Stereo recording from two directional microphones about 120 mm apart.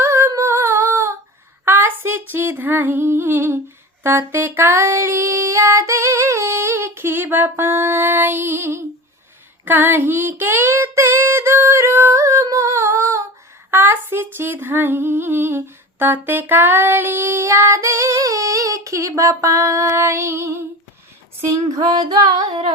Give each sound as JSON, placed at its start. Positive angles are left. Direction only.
{"t": 0.0, "sound": "humming", "side_deg": -25}
{"t": 9.6, "sound": "female singing", "side_deg": -15}
{"t": 13.7, "sound": "a sound", "side_deg": -20}
{"t": 14.3, "sound": "humming", "side_deg": -15}
{"t": 21.8, "sound": "female singing", "side_deg": -35}